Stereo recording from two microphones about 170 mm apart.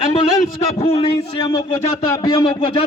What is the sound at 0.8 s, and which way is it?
A man's voice, 35° left (ahead or behind).